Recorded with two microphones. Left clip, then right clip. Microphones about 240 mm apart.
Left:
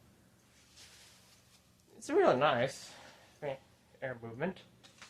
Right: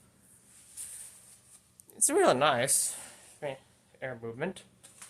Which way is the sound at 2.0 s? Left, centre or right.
Right.